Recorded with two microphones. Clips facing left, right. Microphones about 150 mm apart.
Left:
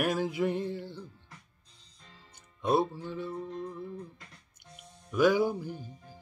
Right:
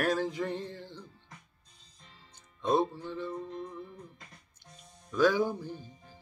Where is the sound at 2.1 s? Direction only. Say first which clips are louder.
Left 1 dB; 10° left (ahead or behind).